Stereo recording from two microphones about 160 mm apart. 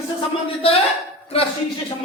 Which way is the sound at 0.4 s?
35° left (ahead or behind).